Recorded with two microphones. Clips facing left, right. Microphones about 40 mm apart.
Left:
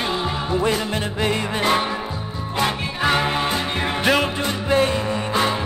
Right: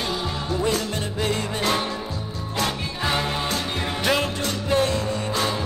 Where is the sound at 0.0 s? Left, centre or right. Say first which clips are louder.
Left 4 dB; left.